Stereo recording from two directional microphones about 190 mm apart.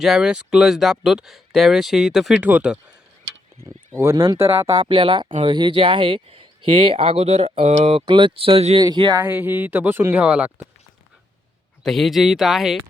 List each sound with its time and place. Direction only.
0.0 s speech: 5° right (ahead or behind); by 9.2 s 20° right (ahead or behind)
9.2 s speech: 10° right (ahead or behind)
11.8 s speech: centre (ahead or behind)